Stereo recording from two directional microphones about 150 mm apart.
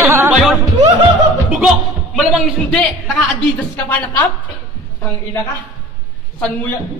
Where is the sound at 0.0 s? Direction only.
20° right (ahead or behind).